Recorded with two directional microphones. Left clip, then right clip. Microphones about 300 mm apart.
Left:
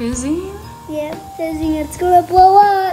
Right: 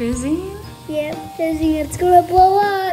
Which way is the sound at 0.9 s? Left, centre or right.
Centre.